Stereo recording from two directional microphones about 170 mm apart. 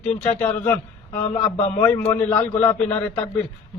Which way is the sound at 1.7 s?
15° left (ahead or behind).